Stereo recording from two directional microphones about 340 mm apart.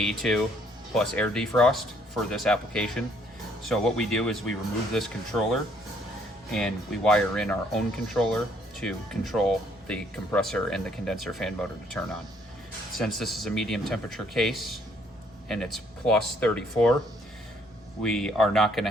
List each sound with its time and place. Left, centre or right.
0.0 s speech: centre
18.0 s speech: centre